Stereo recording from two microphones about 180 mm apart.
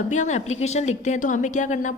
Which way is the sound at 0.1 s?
40° left (ahead or behind).